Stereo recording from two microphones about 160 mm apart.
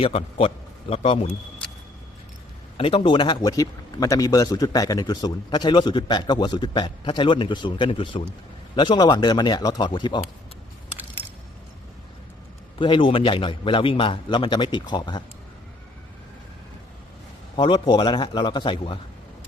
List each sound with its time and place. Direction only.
0.0 s a man's voice: 35° left (ahead or behind)
2.7 s speech: 35° left (ahead or behind)
12.8 s a man's voice: 30° left (ahead or behind)
17.6 s speech: 30° left (ahead or behind)